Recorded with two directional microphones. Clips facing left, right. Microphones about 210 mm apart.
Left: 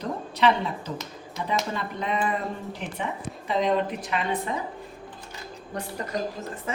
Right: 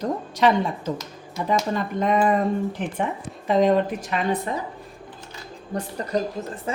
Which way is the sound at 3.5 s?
45° right (ahead or behind).